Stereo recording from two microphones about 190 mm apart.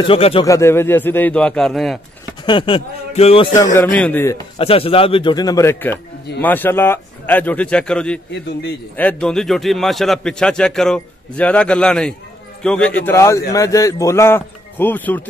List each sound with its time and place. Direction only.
0.0 s speech: 30° left (ahead or behind)
0.5 s a man's voice: 15° left (ahead or behind)
2.4 s speech: 25° left (ahead or behind)
3.5 s a man's voice: 15° left (ahead or behind)
4.6 s a man's voice: 30° left (ahead or behind); by 15.2 s 10° left (ahead or behind)